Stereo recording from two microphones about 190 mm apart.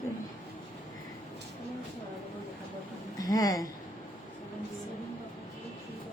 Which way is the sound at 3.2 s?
20° left (ahead or behind).